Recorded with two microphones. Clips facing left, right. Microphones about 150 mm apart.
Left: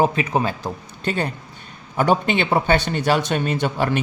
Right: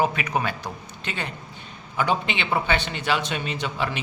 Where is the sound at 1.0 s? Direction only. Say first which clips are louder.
Left 9 dB; 40° left (ahead or behind).